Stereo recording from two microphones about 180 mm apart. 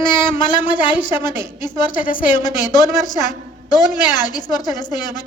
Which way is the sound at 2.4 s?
20° left (ahead or behind).